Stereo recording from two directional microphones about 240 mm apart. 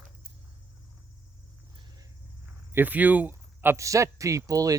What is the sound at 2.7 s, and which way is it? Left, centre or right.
Speech, centre.